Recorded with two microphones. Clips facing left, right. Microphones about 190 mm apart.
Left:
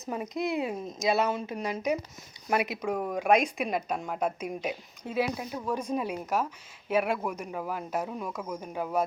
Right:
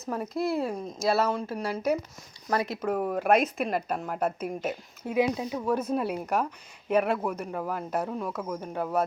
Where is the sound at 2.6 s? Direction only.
Centre (ahead or behind).